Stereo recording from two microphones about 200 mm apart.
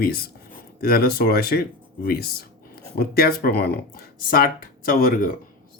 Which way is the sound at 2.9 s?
50° left (ahead or behind).